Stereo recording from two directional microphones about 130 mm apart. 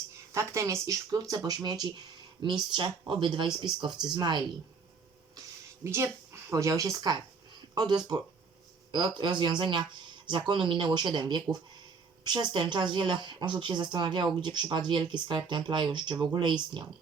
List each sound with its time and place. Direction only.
0.3 s speech: 20° right (ahead or behind)
5.8 s speech: 20° right (ahead or behind)